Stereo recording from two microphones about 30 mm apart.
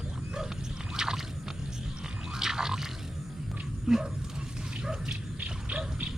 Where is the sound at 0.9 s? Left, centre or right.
Centre.